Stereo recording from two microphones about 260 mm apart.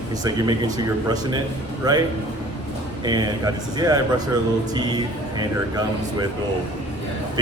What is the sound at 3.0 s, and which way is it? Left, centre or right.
A man's voice, centre.